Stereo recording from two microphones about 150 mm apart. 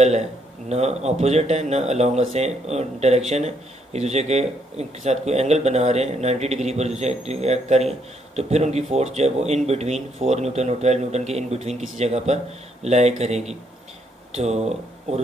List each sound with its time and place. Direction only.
0.7 s speech: 45° right (ahead or behind)